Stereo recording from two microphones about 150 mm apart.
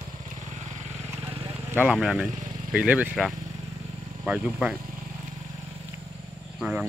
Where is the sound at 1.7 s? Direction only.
10° right (ahead or behind).